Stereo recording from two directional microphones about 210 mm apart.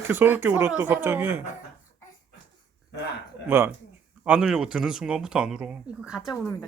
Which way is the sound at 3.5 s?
10° right (ahead or behind).